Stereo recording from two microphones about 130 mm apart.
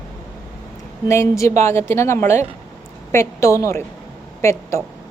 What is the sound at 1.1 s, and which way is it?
Speech, 25° left (ahead or behind).